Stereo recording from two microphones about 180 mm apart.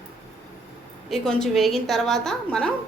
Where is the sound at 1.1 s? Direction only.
Centre (ahead or behind).